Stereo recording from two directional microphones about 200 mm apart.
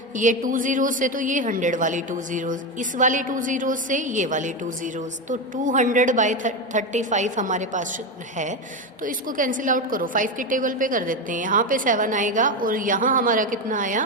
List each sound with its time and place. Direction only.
0.2 s a woman's voice: 40° right (ahead or behind)
9.0 s a woman's voice: 45° right (ahead or behind)